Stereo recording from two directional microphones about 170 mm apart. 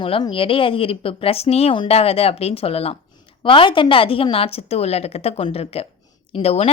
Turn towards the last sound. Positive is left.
turn(degrees=35)  # may be behind; listen again after turning